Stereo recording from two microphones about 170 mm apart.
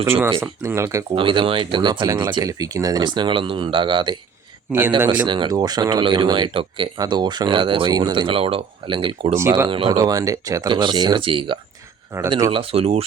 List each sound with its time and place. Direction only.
0.0 s speech: 15° right (ahead or behind)
1.1 s speech: 30° right (ahead or behind)
4.9 s speech: 15° right (ahead or behind)
5.2 s speech: 25° right (ahead or behind)
9.3 s speech: 15° right (ahead or behind)
9.6 s speech: 30° right (ahead or behind)
12.1 s speech: 15° right (ahead or behind)
12.5 s speech: 35° right (ahead or behind)